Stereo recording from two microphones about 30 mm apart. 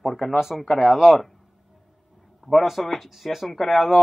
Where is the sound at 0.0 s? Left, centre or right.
Centre.